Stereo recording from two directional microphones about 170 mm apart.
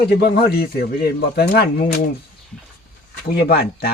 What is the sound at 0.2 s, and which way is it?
Speech, 70° left (ahead or behind).